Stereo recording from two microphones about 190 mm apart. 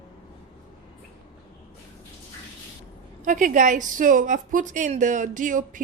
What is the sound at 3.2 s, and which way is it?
A woman's voice, 45° right (ahead or behind).